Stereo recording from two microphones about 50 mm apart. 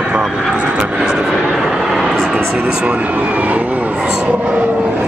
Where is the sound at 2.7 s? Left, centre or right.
Right.